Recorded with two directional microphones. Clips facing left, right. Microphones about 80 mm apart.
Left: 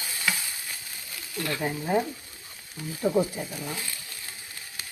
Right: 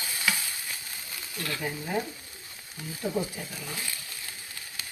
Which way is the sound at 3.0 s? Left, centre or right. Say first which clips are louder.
Left 6 dB; left.